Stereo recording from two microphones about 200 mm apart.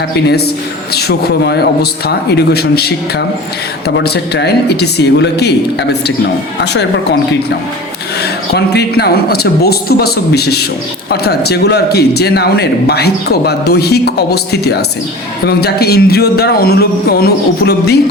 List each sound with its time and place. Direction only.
0.3 s a man's voice: 55° left (ahead or behind)
6.6 s speech: 60° left (ahead or behind)
8.2 s a man's voice: 55° left (ahead or behind)